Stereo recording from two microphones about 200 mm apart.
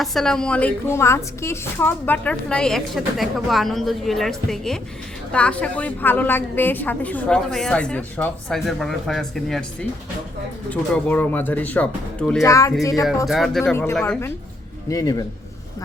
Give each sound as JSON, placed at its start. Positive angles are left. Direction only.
{"t": 0.0, "sound": "a woman's voice", "side_deg": 0}
{"t": 10.7, "sound": "speech", "side_deg": 10}
{"t": 12.4, "sound": "speech", "side_deg": 15}
{"t": 13.2, "sound": "a woman's voice", "side_deg": 0}